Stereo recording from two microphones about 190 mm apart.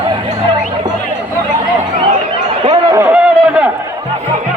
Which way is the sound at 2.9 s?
10° right (ahead or behind).